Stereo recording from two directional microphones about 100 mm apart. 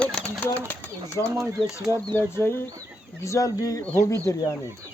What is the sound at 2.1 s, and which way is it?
Speech, 25° left (ahead or behind).